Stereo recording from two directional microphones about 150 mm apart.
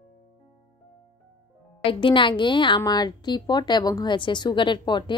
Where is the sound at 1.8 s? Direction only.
35° left (ahead or behind).